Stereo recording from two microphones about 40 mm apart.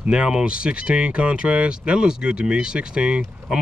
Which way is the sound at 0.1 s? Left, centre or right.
Right.